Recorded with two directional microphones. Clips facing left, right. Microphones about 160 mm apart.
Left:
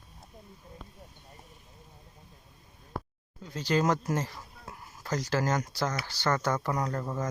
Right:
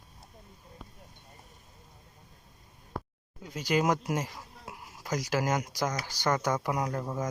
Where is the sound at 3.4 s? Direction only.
10° right (ahead or behind).